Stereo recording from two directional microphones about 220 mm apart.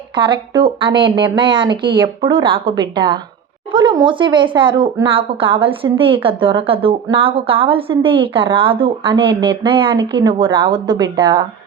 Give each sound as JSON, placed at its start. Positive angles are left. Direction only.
{"t": 0.2, "sound": "a woman's voice", "side_deg": -20}